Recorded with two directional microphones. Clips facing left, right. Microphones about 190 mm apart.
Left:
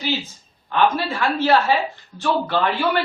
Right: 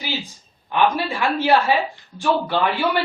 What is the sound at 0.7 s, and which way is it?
A man's voice, 15° right (ahead or behind).